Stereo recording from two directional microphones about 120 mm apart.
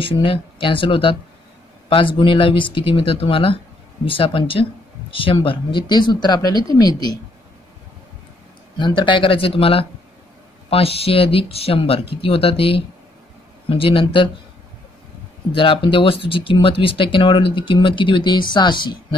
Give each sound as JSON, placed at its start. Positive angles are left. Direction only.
{"t": 0.0, "sound": "speech", "side_deg": 45}
{"t": 8.7, "sound": "speech", "side_deg": 40}
{"t": 15.5, "sound": "speech", "side_deg": 45}